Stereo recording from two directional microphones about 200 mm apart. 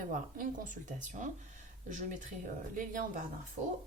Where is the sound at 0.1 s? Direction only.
40° right (ahead or behind).